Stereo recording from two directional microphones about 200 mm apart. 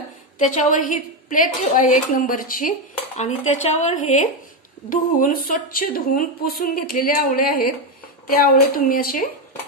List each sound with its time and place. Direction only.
0.4 s a woman's voice: 40° left (ahead or behind)
3.7 s a woman's voice: 35° left (ahead or behind)